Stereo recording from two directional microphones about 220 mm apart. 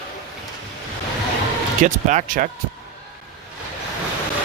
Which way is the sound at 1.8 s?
35° right (ahead or behind).